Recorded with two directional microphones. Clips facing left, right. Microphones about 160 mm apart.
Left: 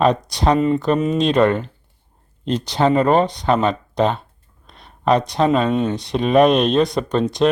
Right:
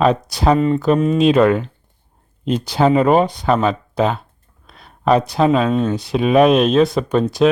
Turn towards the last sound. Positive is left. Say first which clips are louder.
# right 2 dB
turn(degrees=-5)  # may be behind; listen again after turning